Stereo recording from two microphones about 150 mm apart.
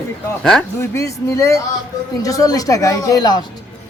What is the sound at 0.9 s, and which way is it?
Speech, 20° left (ahead or behind).